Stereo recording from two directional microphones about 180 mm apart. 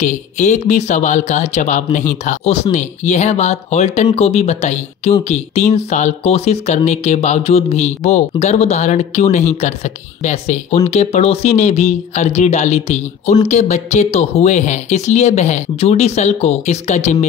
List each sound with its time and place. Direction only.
0.0 s speech: 40° left (ahead or behind)